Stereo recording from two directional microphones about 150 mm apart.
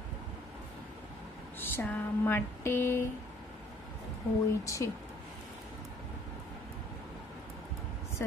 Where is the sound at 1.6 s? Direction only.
15° left (ahead or behind).